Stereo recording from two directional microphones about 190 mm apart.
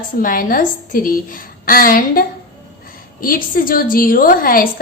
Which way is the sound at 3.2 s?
50° left (ahead or behind).